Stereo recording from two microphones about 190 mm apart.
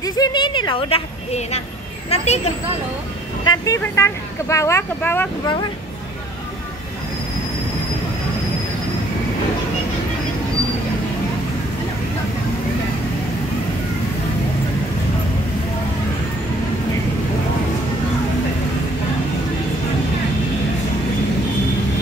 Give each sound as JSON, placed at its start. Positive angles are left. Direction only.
{"t": 0.0, "sound": "a woman's voice", "side_deg": 20}
{"t": 3.4, "sound": "speech", "side_deg": 20}